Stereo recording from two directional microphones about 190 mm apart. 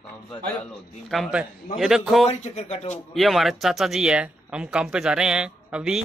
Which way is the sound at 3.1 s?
Centre (ahead or behind).